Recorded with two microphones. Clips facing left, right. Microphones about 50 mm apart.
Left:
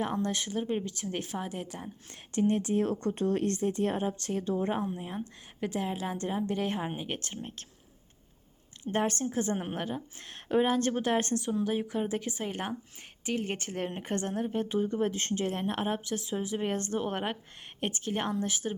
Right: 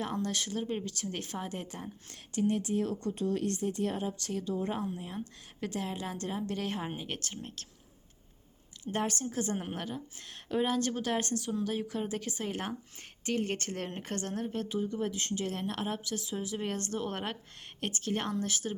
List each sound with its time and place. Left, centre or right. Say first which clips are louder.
0.0 s a woman's voice: left 3 dB; left
2.3 s a woman's voice: left 3 dB; left
8.8 s a woman's voice: left 4 dB; left
12.5 s a woman's voice: left 1 dB; centre
14.7 s a woman's voice: left 4 dB; left